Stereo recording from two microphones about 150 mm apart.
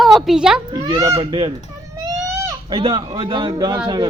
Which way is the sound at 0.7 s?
25° right (ahead or behind).